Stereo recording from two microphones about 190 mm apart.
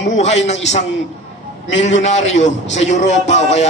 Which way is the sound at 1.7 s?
75° left (ahead or behind).